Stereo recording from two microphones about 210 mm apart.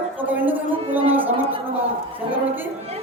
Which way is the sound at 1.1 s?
10° right (ahead or behind).